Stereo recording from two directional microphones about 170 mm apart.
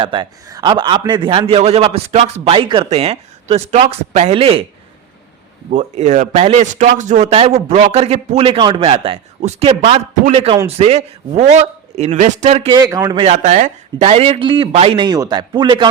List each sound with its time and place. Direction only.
0.0 s a man's voice: 25° right (ahead or behind)
5.7 s a man's voice: 45° right (ahead or behind)
12.7 s a man's voice: 20° right (ahead or behind)
13.2 s a man's voice: 40° right (ahead or behind)